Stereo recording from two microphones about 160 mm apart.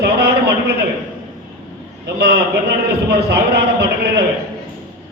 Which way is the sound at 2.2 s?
85° right.